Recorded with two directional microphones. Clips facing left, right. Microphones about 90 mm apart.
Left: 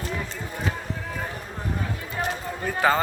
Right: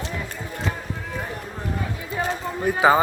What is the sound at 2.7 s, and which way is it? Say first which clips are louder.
Speech: right 5 dB; 15° right (ahead or behind).